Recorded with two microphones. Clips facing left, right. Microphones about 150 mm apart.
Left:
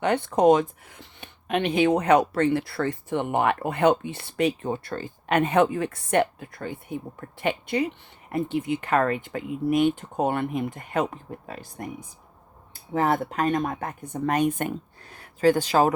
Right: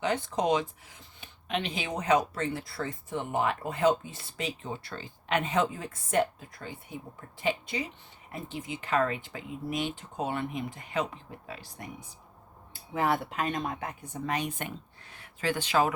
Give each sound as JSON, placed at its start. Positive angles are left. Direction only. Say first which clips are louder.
{"t": 0.0, "sound": "speech", "louder": "left 9 dB", "side_deg": 60}
{"t": 12.9, "sound": "speech", "louder": "left 5 dB", "side_deg": 45}